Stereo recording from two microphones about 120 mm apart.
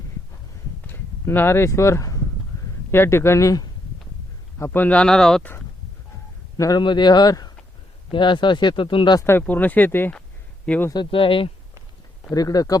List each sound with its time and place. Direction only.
0.9 s speech: 15° left (ahead or behind)
6.6 s speech: 35° left (ahead or behind)
9.5 s speech: 15° left (ahead or behind)
10.9 s speech: 45° left (ahead or behind)
12.3 s speech: 30° left (ahead or behind)